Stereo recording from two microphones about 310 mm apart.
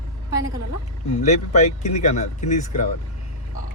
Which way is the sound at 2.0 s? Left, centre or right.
Left.